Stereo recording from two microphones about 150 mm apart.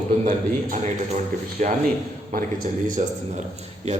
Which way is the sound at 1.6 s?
55° right (ahead or behind).